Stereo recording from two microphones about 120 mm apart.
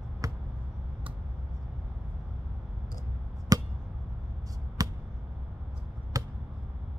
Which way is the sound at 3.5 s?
30° right (ahead or behind).